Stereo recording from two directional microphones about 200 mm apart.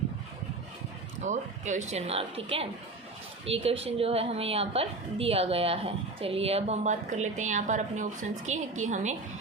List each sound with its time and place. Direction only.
1.2 s a woman's voice: 35° right (ahead or behind)